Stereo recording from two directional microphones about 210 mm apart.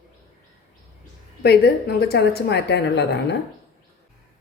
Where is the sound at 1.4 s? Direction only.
50° left (ahead or behind).